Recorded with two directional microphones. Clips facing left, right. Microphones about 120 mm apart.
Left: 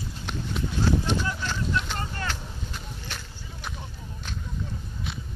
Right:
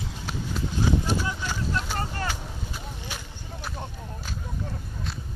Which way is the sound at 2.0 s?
35° right (ahead or behind).